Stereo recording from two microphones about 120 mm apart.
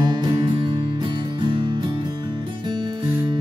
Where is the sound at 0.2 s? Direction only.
45° right (ahead or behind).